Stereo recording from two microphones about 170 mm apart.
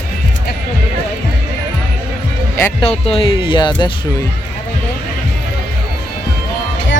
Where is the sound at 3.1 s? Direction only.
30° left (ahead or behind).